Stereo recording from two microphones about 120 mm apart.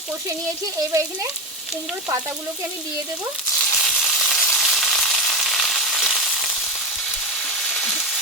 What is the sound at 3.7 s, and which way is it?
Frying, centre (ahead or behind).